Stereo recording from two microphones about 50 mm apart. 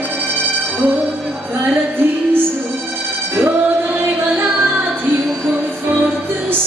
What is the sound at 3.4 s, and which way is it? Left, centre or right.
Music, right.